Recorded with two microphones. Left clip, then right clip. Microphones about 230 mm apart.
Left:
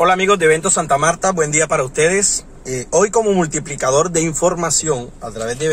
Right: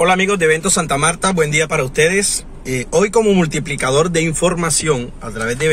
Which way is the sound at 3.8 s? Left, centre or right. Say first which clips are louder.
Even; centre.